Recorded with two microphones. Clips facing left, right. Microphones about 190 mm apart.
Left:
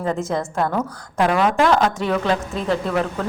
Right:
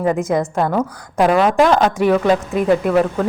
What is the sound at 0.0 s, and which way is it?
A woman's voice, 15° right (ahead or behind).